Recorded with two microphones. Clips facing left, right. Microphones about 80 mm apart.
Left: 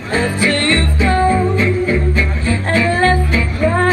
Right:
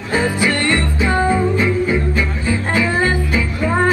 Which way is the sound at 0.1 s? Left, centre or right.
Centre.